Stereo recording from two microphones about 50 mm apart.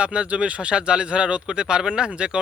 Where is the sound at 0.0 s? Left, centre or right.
Right.